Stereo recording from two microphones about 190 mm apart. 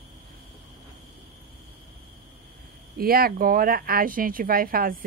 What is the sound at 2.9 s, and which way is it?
Speech, 50° right (ahead or behind).